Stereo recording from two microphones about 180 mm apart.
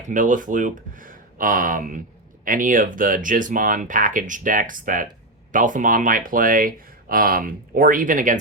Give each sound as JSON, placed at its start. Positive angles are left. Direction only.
{"t": 0.1, "sound": "speech", "side_deg": -45}